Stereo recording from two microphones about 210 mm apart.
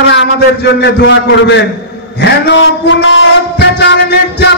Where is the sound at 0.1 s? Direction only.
55° left (ahead or behind).